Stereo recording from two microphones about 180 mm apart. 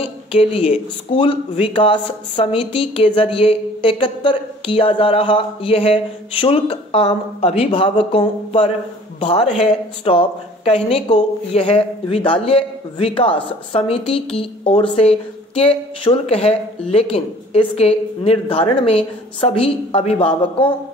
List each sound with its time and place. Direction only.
0.0 s a woman's voice: 30° left (ahead or behind)